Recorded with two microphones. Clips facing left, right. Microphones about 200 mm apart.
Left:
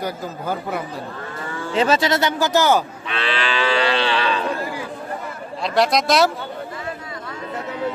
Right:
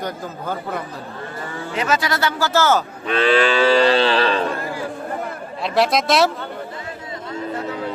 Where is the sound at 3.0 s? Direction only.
45° right (ahead or behind).